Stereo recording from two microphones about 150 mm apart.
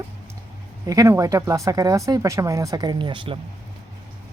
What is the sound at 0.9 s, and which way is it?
Speech, 20° right (ahead or behind).